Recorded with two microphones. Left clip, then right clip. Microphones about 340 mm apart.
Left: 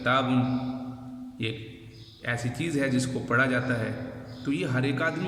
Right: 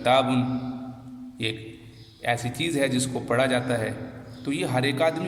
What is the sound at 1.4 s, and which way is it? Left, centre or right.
A man's voice, centre.